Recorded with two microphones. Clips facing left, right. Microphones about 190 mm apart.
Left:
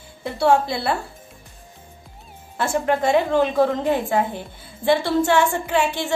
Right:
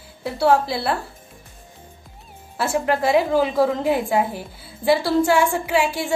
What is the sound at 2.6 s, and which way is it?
A woman's voice, 5° right (ahead or behind).